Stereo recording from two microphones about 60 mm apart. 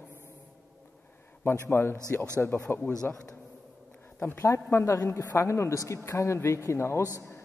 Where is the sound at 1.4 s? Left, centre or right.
Left.